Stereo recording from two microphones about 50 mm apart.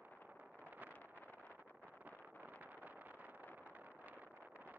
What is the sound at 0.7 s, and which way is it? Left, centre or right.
Wind noise, right.